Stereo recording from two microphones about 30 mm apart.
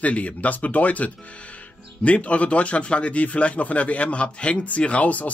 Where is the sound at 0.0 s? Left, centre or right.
Left.